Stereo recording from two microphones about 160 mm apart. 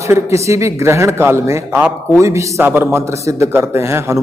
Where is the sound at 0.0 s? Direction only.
20° right (ahead or behind).